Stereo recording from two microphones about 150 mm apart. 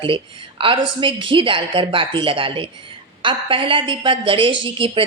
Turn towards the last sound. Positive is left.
turn(degrees=-35)  # may be behind; listen again after turning